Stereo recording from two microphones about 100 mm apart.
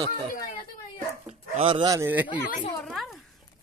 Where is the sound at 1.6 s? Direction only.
60° right (ahead or behind).